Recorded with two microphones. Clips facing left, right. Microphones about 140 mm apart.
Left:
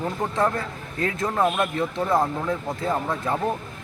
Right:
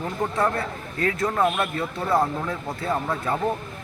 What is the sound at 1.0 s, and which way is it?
Speech, 20° left (ahead or behind).